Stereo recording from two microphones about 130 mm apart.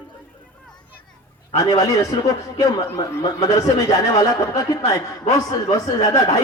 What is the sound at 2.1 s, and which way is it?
Speech, 30° left (ahead or behind).